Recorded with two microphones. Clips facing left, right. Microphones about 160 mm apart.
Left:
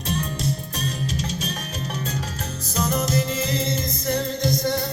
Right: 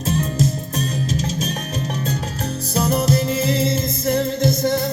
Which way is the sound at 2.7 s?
30° right (ahead or behind).